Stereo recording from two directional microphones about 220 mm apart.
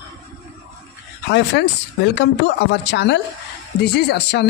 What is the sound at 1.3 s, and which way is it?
Speech, 50° left (ahead or behind).